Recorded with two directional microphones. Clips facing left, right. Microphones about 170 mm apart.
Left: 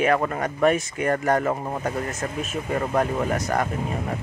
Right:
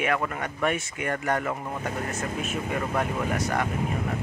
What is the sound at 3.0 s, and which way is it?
Speech, 45° left (ahead or behind).